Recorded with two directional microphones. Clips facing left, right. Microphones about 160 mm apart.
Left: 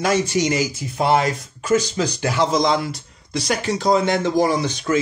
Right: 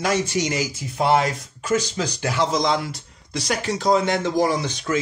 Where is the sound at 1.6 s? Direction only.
45° left (ahead or behind).